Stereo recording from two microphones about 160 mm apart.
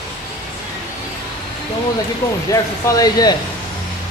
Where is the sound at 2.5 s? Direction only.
20° left (ahead or behind).